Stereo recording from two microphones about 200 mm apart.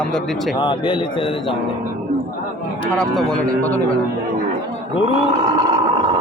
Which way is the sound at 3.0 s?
5° left (ahead or behind).